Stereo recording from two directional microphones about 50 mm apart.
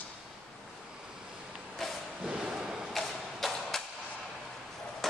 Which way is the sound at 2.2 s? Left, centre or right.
Centre.